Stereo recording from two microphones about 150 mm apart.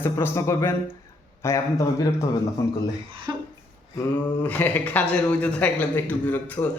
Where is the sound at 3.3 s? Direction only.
25° right (ahead or behind).